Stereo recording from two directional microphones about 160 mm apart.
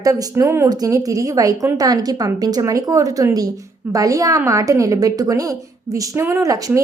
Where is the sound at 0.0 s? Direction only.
20° right (ahead or behind).